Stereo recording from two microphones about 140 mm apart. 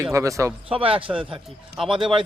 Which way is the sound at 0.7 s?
40° right (ahead or behind).